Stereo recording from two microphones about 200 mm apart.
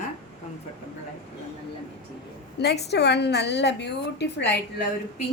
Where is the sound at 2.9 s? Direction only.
55° left (ahead or behind).